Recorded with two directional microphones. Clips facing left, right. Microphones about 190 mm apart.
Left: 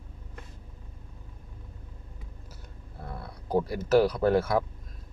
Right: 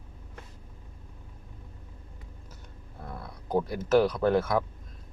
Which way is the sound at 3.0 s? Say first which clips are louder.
Even; 5° left (ahead or behind).